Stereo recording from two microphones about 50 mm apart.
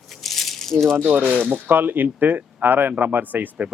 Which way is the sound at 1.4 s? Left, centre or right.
Right.